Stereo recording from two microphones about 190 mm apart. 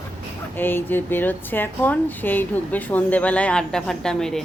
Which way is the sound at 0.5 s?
10° left (ahead or behind).